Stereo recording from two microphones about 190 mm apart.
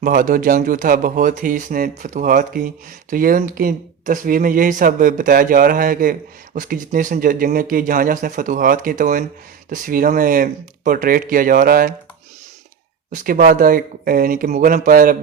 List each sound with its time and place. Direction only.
0.0 s speech: 45° right (ahead or behind)
13.1 s speech: 45° right (ahead or behind)